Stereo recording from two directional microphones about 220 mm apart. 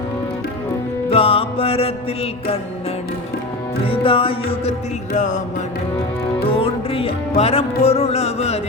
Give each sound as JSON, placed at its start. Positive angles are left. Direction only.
{"t": 1.1, "sound": "music", "side_deg": 25}
{"t": 3.8, "sound": "music", "side_deg": 25}
{"t": 6.4, "sound": "music", "side_deg": 25}